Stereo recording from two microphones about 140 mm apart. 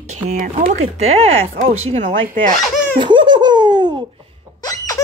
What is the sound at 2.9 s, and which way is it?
Laughter, 35° right (ahead or behind).